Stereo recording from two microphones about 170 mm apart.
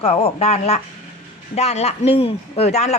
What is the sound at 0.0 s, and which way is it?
Speech, 40° left (ahead or behind).